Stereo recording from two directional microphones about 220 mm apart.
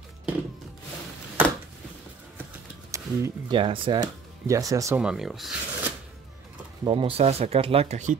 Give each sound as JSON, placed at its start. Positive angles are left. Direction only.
{"t": 2.9, "sound": "speech", "side_deg": -15}
{"t": 6.8, "sound": "speech", "side_deg": -20}